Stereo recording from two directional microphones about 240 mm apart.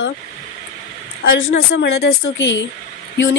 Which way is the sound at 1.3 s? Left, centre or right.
Left.